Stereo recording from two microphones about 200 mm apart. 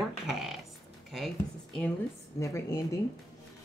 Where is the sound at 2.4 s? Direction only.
15° left (ahead or behind).